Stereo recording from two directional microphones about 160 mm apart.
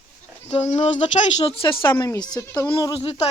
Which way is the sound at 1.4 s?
35° left (ahead or behind).